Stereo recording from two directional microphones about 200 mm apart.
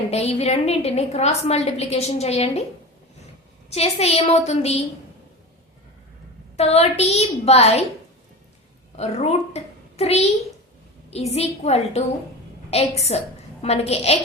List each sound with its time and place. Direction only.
0.1 s a woman's voice: 30° left (ahead or behind)
3.7 s a woman's voice: 30° left (ahead or behind)
6.6 s a woman's voice: 30° left (ahead or behind)
9.0 s a woman's voice: 35° left (ahead or behind)